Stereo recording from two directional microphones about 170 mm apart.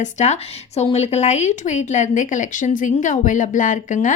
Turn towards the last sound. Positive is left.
turn(degrees=50)  # may be behind; listen again after turning